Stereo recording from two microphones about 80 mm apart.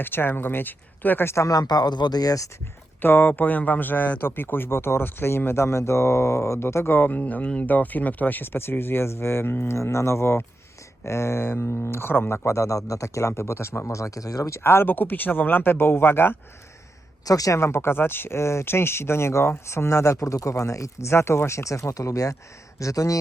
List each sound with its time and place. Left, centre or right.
0.0 s speech: left
1.5 s speech: left
3.0 s speech: left
12.5 s speech: left
14.6 s speech: left
17.2 s speech: left